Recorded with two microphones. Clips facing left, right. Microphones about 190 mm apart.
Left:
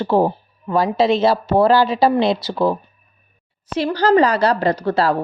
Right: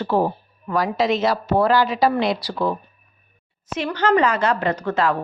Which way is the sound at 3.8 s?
35° left (ahead or behind).